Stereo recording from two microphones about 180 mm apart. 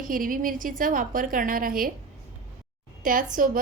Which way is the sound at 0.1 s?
50° right (ahead or behind).